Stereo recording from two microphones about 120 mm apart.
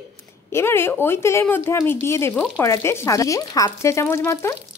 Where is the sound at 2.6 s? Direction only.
25° left (ahead or behind).